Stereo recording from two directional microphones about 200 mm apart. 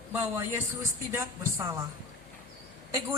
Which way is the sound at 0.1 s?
10° right (ahead or behind).